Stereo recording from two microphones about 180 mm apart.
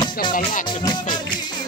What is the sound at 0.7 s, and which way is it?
Music, 25° left (ahead or behind).